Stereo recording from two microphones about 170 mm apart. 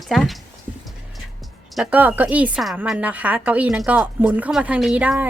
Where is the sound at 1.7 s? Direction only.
5° right (ahead or behind).